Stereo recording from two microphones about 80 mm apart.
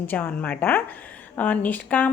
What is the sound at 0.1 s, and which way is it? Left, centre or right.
A woman's voice, left.